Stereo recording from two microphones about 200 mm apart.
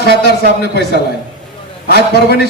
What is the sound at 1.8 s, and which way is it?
Speech, 55° left (ahead or behind).